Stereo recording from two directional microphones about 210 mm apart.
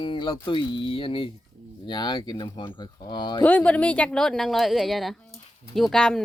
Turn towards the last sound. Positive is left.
turn(degrees=5)  # may be behind; listen again after turning